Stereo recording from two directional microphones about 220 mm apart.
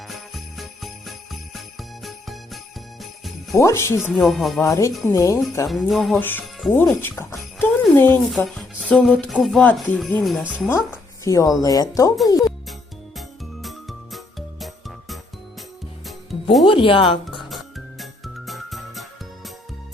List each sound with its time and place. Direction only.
0.1 s jingle bell: centre (ahead or behind)
3.6 s speech: 10° left (ahead or behind)
4.0 s speech: centre (ahead or behind)
4.6 s speech: 15° left (ahead or behind)
5.6 s speech: centre (ahead or behind)
10.7 s speech: 15° left (ahead or behind)
12.4 s music: centre (ahead or behind)
16.6 s speech: 25° left (ahead or behind)
17.5 s music: centre (ahead or behind)